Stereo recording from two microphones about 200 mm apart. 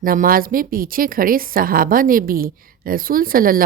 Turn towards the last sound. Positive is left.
turn(degrees=-45)  # may be behind; listen again after turning